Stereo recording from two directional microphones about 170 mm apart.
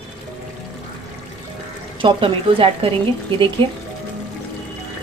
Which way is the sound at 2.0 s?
30° right (ahead or behind).